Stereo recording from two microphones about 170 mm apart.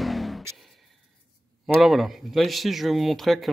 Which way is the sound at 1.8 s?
Centre (ahead or behind).